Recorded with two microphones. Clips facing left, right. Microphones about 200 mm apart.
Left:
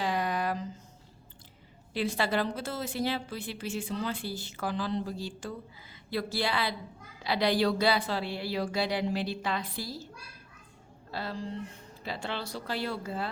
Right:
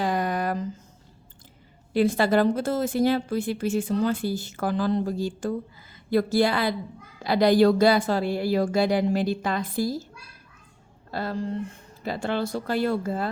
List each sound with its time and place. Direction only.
0.0 s a sound: 45° right (ahead or behind)
1.9 s speech: 50° right (ahead or behind)
11.1 s speech: 50° right (ahead or behind)